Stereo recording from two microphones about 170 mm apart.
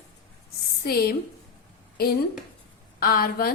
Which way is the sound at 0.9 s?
65° left (ahead or behind).